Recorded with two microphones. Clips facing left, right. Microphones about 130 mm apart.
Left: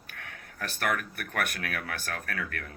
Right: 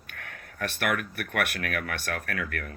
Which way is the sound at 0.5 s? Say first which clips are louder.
Right 2 dB; 70° right (ahead or behind).